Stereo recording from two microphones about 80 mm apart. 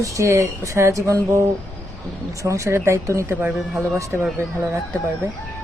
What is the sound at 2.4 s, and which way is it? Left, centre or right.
Speech, right.